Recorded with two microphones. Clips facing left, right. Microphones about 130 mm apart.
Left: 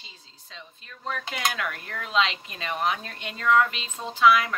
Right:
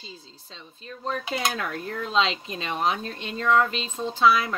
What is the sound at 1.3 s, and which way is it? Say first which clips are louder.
Speech: even; 30° right (ahead or behind).